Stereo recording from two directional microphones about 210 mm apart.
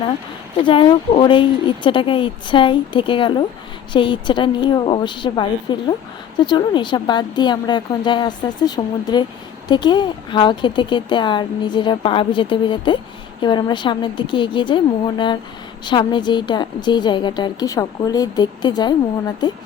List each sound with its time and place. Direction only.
0.6 s speech: 25° left (ahead or behind)